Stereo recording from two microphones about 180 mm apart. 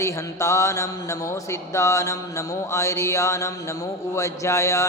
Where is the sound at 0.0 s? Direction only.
15° left (ahead or behind).